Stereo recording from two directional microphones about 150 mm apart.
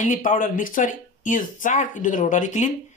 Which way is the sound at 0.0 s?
60° left (ahead or behind).